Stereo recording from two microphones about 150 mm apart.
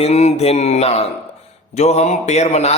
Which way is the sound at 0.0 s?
50° left (ahead or behind).